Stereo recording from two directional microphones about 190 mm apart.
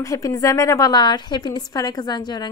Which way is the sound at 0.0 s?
15° left (ahead or behind).